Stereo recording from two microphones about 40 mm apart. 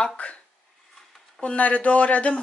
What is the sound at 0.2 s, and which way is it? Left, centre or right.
Speech, left.